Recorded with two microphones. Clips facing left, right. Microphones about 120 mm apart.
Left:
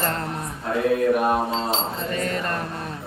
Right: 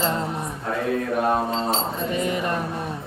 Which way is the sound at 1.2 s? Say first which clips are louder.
Even; 15° left (ahead or behind).